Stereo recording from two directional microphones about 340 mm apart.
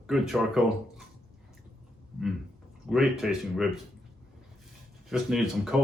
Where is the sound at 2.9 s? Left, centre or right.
Centre.